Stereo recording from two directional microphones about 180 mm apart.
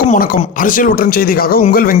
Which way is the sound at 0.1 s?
50° left (ahead or behind).